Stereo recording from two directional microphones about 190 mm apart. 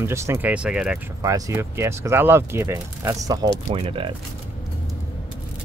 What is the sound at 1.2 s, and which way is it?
Speech, 15° right (ahead or behind).